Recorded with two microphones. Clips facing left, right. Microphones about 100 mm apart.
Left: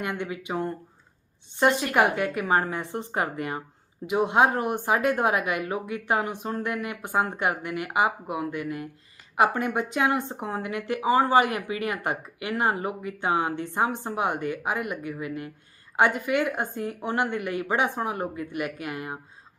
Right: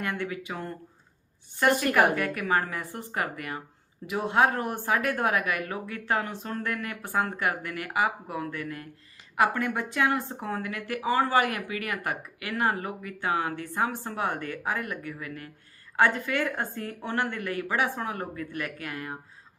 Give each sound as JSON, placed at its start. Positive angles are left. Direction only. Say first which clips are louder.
{"t": 0.0, "sound": "speech", "louder": "left 1 dB", "side_deg": 20}